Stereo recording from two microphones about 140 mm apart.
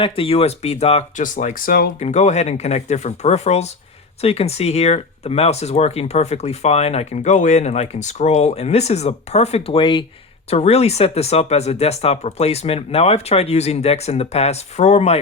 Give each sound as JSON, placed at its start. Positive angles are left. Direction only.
{"t": 0.0, "sound": "speech", "side_deg": 45}
{"t": 1.2, "sound": "speech", "side_deg": 65}
{"t": 2.0, "sound": "speech", "side_deg": 55}
{"t": 10.5, "sound": "speech", "side_deg": 50}